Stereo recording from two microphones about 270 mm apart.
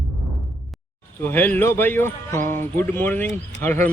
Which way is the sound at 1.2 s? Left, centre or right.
Centre.